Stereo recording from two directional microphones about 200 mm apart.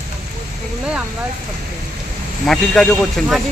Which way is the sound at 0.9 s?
5° right (ahead or behind).